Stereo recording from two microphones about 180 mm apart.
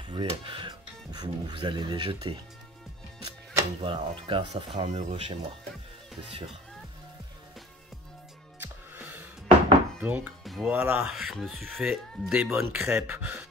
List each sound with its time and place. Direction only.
0.0 s speech: 30° right (ahead or behind)
8.5 s music: 10° right (ahead or behind)
9.9 s speech: 10° right (ahead or behind)
10.7 s speech: 10° right (ahead or behind)
11.1 s speech: centre (ahead or behind)